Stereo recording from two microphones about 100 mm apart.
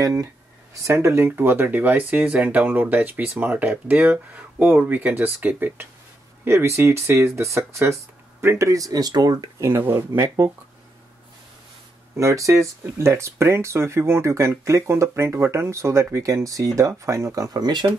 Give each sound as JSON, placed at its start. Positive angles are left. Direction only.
{"t": 0.0, "sound": "speech", "side_deg": -35}
{"t": 9.6, "sound": "speech", "side_deg": -25}
{"t": 12.2, "sound": "speech", "side_deg": -30}